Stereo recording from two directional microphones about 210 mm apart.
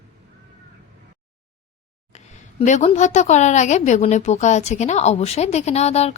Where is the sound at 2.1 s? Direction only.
30° left (ahead or behind).